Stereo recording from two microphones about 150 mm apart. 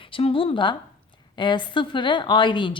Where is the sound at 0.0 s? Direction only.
40° left (ahead or behind).